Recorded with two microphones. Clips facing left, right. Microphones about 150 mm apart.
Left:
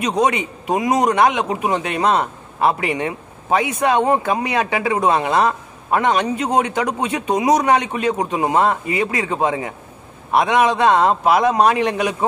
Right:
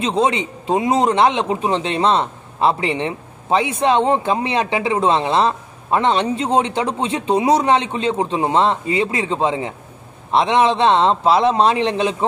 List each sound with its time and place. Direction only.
0.0 s a man's voice: 25° right (ahead or behind)